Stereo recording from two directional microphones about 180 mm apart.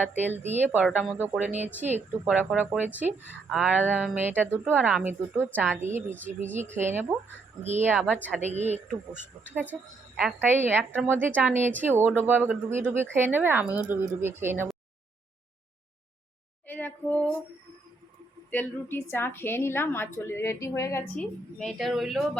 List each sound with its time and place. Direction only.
0.3 s a woman's voice: 40° right (ahead or behind)
0.6 s speech: 10° right (ahead or behind)
3.2 s a woman's voice: 10° left (ahead or behind)
3.5 s speech: 5° right (ahead or behind)
7.6 s a woman's voice: 40° right (ahead or behind)
7.9 s speech: 10° right (ahead or behind)
8.4 s a woman's voice: 40° right (ahead or behind)
9.7 s a woman's voice: centre (ahead or behind)
16.6 s a sound: 10° left (ahead or behind)
18.5 s a woman's voice: 10° left (ahead or behind)
21.2 s a woman's voice: 5° left (ahead or behind)